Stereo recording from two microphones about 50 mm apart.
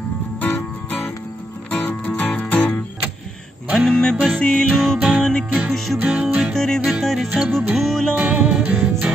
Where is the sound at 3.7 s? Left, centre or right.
Centre.